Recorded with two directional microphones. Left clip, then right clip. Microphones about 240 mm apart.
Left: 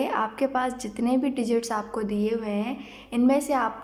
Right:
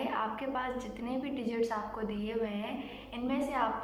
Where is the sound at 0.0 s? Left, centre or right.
Left.